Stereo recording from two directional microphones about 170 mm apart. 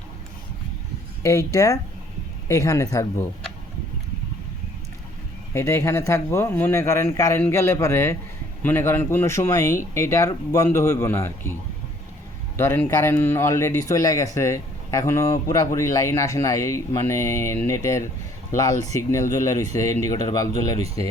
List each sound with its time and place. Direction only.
1.2 s speech: 20° left (ahead or behind)
5.5 s speech: 15° left (ahead or behind)
12.5 s speech: 15° left (ahead or behind)